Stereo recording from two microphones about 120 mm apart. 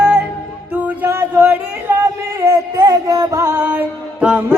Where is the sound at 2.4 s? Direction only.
25° right (ahead or behind).